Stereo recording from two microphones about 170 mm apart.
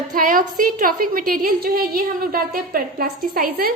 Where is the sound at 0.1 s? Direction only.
55° right (ahead or behind).